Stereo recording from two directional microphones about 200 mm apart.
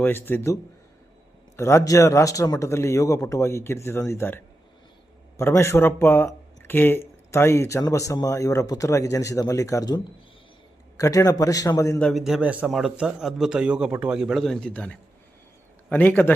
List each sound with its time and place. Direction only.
0.0 s speech: 10° left (ahead or behind)
12.0 s a man's voice: centre (ahead or behind)